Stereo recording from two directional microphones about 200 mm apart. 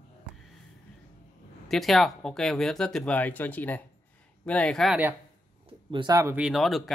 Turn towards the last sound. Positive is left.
turn(degrees=0)  # may be behind; listen again after turning